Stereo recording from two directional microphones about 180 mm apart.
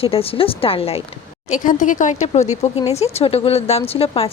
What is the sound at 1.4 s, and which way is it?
Speech, 45° left (ahead or behind).